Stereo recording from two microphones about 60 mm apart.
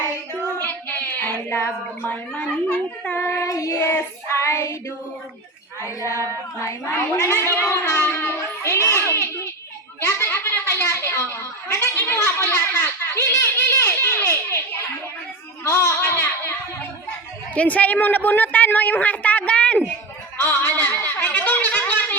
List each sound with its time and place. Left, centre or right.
0.6 s child singing: left
2.0 s a woman's voice: left
3.2 s child singing: left
3.8 s child singing: left
6.9 s a woman's voice: left
10.1 s a sound: left
17.5 s a woman's voice: left
20.4 s a sound: left